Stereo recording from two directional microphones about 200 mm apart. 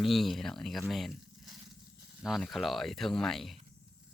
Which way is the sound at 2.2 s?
Centre (ahead or behind).